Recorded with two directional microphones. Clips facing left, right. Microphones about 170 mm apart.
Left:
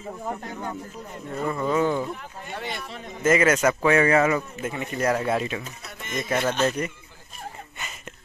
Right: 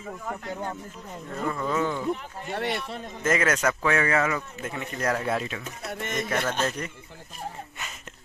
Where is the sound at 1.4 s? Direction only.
15° left (ahead or behind).